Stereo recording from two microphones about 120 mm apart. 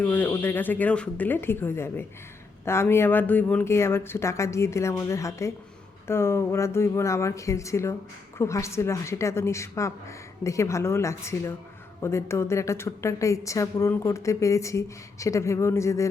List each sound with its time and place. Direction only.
0.0 s a woman's voice: 15° left (ahead or behind)